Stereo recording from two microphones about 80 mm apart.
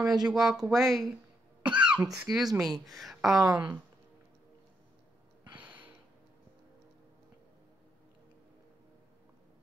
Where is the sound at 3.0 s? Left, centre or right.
Centre.